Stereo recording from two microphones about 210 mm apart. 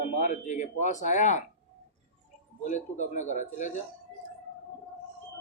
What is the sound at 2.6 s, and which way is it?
Speech, 35° left (ahead or behind).